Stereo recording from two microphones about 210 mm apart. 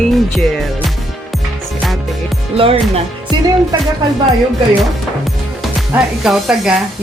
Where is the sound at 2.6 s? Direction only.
25° right (ahead or behind).